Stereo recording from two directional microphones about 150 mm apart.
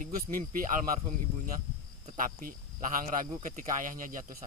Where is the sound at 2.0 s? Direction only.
65° right (ahead or behind).